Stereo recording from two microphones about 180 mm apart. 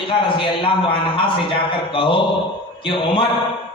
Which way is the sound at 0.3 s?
30° left (ahead or behind).